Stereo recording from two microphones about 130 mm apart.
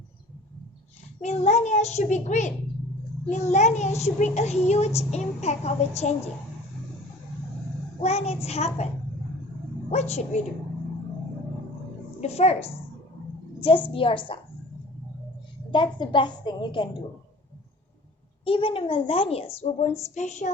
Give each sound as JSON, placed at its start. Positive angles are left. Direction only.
{"t": 1.2, "sound": "a child's voice", "side_deg": 55}
{"t": 8.0, "sound": "a woman's voice", "side_deg": 55}
{"t": 9.9, "sound": "a child's voice", "side_deg": 55}
{"t": 12.2, "sound": "a woman's voice", "side_deg": 55}
{"t": 15.7, "sound": "a woman's voice", "side_deg": 40}
{"t": 18.4, "sound": "a woman's voice", "side_deg": 45}
{"t": 20.1, "sound": "a child's voice", "side_deg": 65}